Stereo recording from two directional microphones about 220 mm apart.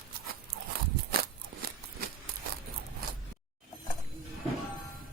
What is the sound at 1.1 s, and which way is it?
Crunch, 45° right (ahead or behind).